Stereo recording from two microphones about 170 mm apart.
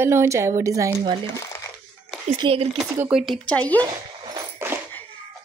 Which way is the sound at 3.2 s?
5° left (ahead or behind).